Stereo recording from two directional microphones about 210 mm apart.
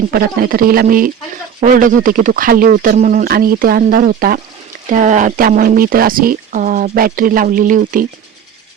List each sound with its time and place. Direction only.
0.1 s speech: 45° right (ahead or behind)